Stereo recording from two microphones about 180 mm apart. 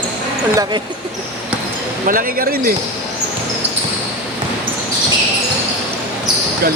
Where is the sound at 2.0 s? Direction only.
50° right (ahead or behind).